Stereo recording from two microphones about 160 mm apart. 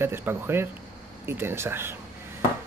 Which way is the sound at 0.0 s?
15° right (ahead or behind).